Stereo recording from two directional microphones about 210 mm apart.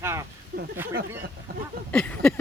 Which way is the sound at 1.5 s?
45° right (ahead or behind).